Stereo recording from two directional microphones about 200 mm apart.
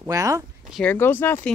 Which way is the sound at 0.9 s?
10° left (ahead or behind).